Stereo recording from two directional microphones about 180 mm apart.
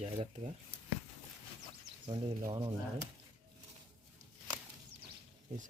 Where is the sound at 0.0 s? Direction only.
35° right (ahead or behind).